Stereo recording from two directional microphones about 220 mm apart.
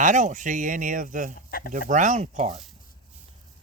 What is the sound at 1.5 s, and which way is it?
Speech, 45° left (ahead or behind).